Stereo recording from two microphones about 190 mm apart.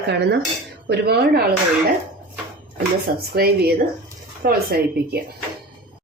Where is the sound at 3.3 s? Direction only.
55° right (ahead or behind).